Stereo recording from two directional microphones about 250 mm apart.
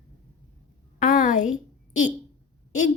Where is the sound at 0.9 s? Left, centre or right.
Left.